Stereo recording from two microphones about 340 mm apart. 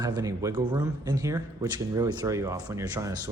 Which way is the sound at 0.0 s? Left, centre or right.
Centre.